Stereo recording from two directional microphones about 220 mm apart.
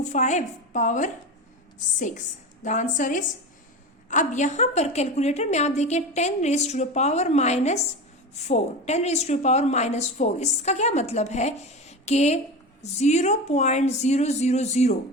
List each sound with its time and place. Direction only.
0.0 s a woman's voice: 35° left (ahead or behind)
2.6 s a woman's voice: 35° left (ahead or behind)